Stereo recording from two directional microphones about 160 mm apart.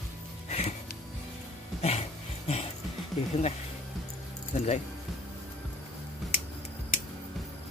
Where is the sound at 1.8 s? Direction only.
40° left (ahead or behind).